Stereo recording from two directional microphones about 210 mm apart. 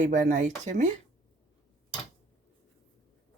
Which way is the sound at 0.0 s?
35° right (ahead or behind).